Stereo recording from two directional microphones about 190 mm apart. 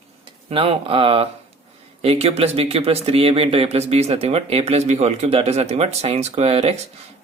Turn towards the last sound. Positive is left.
turn(degrees=-35)  # may be behind; listen again after turning